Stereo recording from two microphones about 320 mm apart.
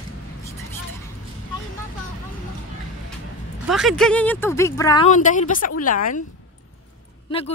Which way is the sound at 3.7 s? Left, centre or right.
Centre.